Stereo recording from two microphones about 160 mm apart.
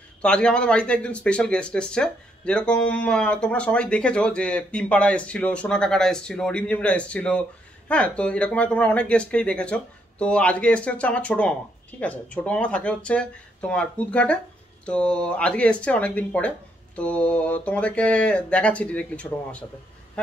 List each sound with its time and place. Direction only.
0.2 s speech: 5° left (ahead or behind)